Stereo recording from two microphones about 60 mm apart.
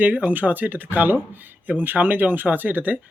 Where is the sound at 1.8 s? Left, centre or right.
Right.